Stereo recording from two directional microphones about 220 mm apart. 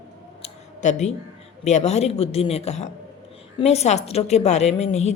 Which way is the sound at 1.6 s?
30° left (ahead or behind).